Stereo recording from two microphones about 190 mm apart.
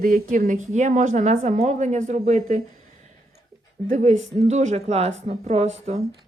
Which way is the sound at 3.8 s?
40° right (ahead or behind).